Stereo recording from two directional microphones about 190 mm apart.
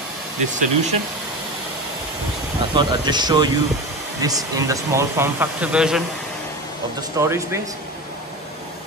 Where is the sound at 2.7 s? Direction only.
20° right (ahead or behind); by 6.0 s 5° right (ahead or behind).